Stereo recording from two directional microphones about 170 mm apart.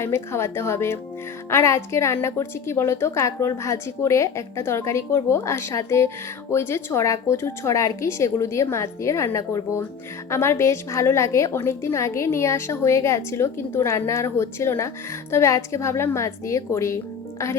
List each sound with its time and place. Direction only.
0.0 s a woman's voice: 15° left (ahead or behind)